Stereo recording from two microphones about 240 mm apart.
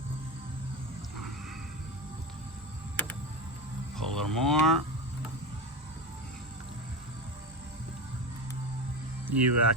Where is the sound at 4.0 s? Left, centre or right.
Centre.